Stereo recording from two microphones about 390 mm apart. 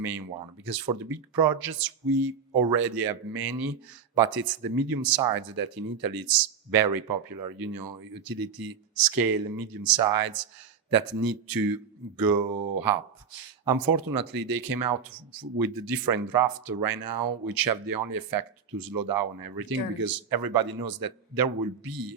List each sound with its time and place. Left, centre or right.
0.6 s speech: right
13.7 s speech: right